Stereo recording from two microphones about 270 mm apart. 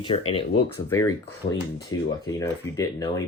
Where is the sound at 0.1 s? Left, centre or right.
Left.